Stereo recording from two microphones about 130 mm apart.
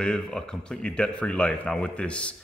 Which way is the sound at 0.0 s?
5° left (ahead or behind).